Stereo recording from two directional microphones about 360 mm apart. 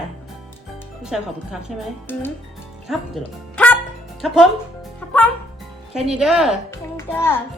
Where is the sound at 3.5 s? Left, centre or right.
Centre.